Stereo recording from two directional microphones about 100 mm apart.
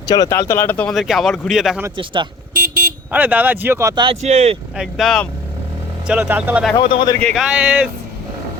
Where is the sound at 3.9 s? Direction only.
55° right (ahead or behind).